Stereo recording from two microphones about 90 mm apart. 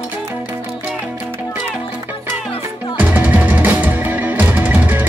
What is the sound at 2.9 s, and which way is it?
Music, 15° right (ahead or behind).